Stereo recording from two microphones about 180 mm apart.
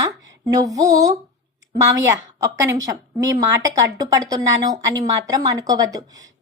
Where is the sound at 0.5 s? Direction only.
20° right (ahead or behind).